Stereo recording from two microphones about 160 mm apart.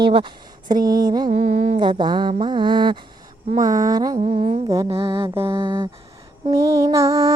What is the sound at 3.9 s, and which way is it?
Mantra, 25° right (ahead or behind).